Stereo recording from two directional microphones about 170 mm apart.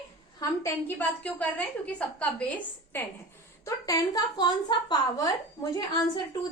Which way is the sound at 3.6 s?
20° left (ahead or behind).